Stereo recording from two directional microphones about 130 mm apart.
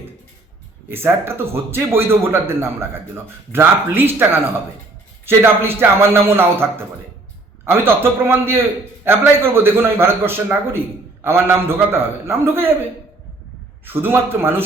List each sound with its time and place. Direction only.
0.9 s a man's voice: 15° right (ahead or behind)
13.8 s speech: 15° right (ahead or behind)